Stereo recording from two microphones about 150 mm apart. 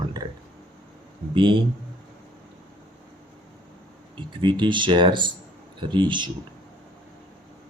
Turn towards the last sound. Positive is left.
turn(degrees=-30)  # may be behind; listen again after turning